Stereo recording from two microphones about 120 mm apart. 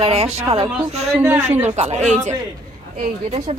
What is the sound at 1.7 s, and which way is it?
Speech, 70° right (ahead or behind).